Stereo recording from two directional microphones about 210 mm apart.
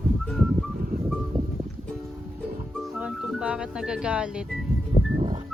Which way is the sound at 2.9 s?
5° right (ahead or behind).